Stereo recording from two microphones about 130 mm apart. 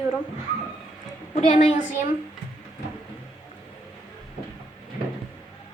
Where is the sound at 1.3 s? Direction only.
60° left (ahead or behind).